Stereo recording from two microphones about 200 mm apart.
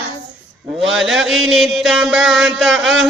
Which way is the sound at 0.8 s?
Centre (ahead or behind).